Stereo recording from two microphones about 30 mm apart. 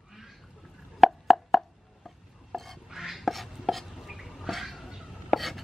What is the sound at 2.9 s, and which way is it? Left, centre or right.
Chopping, centre.